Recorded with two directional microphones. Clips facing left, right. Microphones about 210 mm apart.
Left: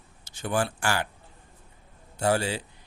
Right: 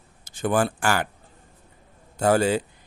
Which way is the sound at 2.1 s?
45° right (ahead or behind).